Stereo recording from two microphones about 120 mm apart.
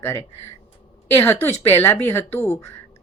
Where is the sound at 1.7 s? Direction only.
15° left (ahead or behind).